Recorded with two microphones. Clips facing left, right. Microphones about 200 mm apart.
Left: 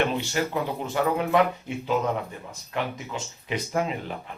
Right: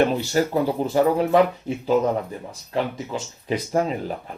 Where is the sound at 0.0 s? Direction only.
40° right (ahead or behind).